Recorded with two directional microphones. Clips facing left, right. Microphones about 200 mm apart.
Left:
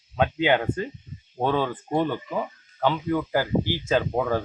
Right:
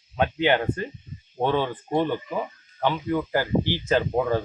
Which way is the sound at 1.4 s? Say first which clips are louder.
Even; 15° right (ahead or behind).